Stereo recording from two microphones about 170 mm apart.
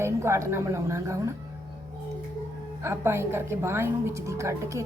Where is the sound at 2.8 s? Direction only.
15° right (ahead or behind).